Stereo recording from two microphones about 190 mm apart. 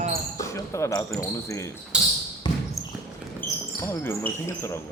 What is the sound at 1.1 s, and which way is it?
Speech, 15° left (ahead or behind).